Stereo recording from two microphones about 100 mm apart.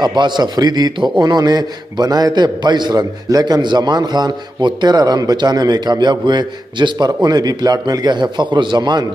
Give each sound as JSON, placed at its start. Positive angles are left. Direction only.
{"t": 0.0, "sound": "a man's voice", "side_deg": -45}